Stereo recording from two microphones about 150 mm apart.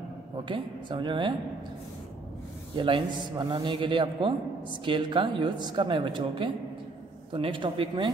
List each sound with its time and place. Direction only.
0.5 s a man's voice: 30° right (ahead or behind)
2.7 s a man's voice: 35° right (ahead or behind)